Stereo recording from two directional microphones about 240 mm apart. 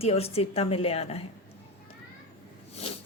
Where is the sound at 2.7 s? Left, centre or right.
Left.